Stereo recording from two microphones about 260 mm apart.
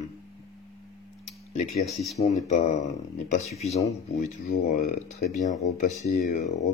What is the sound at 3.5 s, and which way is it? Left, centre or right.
Speech, left.